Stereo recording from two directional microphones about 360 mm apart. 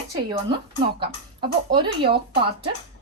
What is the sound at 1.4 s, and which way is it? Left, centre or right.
Speech, centre.